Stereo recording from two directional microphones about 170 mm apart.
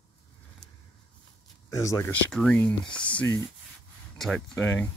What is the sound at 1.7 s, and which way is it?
Speech, 20° left (ahead or behind).